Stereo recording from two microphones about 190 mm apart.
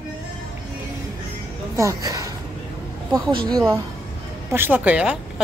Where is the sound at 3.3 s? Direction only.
25° right (ahead or behind).